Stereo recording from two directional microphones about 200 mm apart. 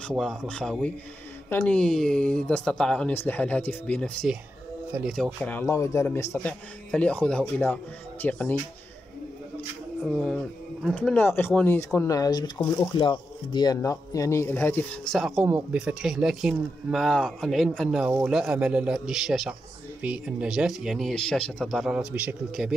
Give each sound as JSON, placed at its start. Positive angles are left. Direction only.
{"t": 0.0, "sound": "a man's voice", "side_deg": 0}
{"t": 10.0, "sound": "a man's voice", "side_deg": 0}